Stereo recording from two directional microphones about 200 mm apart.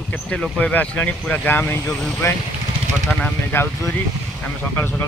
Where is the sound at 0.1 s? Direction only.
5° left (ahead or behind).